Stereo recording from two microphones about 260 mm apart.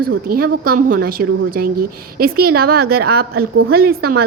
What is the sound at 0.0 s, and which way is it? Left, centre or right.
A woman's voice, right.